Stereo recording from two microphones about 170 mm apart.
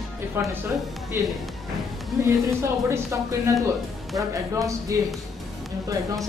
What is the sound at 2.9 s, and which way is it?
Speech, 15° right (ahead or behind).